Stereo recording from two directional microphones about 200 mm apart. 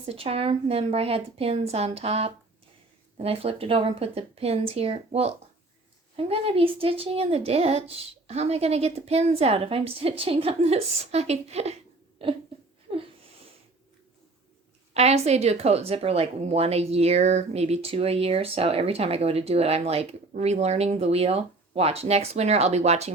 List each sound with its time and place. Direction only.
0.1 s a woman's voice: 30° right (ahead or behind)
12.9 s a sound: 35° right (ahead or behind)
14.9 s speech: 30° right (ahead or behind)